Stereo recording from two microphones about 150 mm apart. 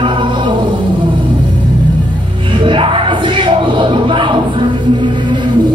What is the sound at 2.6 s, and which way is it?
Music, 35° right (ahead or behind).